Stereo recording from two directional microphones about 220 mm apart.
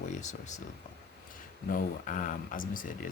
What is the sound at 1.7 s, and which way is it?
Speech, 35° left (ahead or behind).